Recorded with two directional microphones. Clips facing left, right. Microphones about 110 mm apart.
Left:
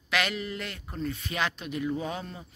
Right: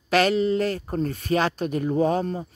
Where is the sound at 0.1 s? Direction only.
35° right (ahead or behind).